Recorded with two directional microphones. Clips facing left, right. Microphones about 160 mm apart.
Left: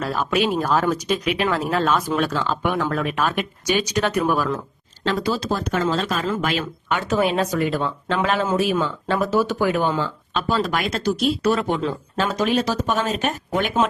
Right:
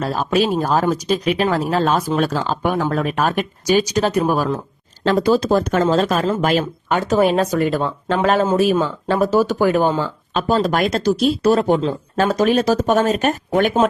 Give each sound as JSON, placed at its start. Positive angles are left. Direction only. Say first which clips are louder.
{"t": 0.0, "sound": "speech", "louder": "right 3 dB", "side_deg": -30}
{"t": 5.0, "sound": "speech", "louder": "right 7 dB", "side_deg": -45}